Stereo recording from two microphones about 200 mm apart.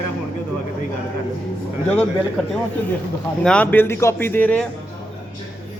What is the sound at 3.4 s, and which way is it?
Speech, 5° left (ahead or behind).